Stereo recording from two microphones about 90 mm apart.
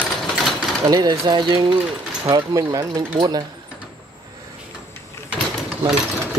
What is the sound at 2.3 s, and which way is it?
Speech, 35° right (ahead or behind).